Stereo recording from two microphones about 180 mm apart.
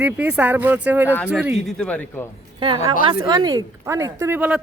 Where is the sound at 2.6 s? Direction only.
30° right (ahead or behind).